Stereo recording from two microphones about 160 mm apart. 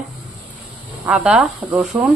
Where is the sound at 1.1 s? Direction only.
5° right (ahead or behind).